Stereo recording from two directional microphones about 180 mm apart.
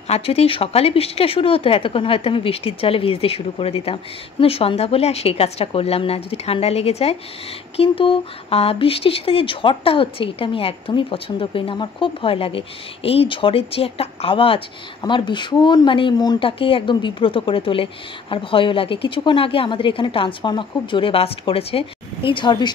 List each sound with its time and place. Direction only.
0.1 s speech: 35° left (ahead or behind)